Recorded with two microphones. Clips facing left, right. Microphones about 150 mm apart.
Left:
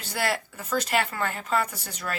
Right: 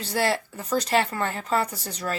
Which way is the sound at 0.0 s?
30° right (ahead or behind).